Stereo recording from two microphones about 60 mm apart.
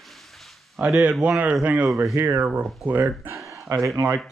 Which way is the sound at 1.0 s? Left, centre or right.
Centre.